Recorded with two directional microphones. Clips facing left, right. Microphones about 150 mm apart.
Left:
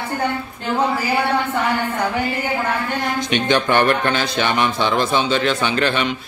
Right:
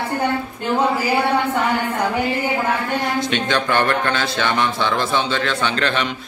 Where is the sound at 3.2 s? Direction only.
15° left (ahead or behind).